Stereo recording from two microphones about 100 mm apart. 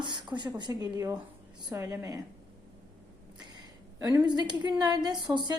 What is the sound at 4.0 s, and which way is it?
A woman's voice, 40° right (ahead or behind).